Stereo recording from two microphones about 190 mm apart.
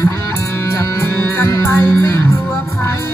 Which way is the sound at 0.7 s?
15° left (ahead or behind).